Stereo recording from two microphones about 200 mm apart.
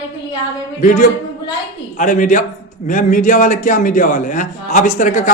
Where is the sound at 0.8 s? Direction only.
40° left (ahead or behind).